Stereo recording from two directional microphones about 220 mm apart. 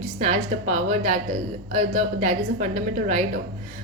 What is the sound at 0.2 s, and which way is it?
A woman's voice, 30° right (ahead or behind).